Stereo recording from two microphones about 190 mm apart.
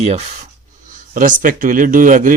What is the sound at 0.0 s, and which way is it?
Speech, 35° right (ahead or behind).